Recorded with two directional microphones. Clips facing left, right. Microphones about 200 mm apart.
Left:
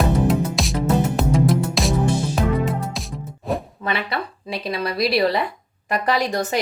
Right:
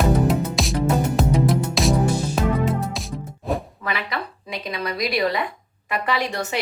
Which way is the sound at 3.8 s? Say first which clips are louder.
Left 3 dB; 30° left (ahead or behind).